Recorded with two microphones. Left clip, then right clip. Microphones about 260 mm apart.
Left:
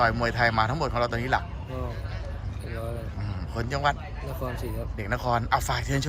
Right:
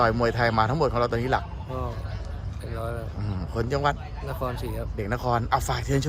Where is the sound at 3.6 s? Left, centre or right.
Centre.